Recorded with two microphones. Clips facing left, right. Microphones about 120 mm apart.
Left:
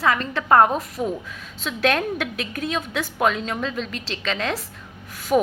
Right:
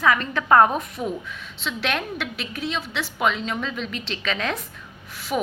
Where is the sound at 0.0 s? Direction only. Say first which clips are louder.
Right 1 dB; 30° left (ahead or behind).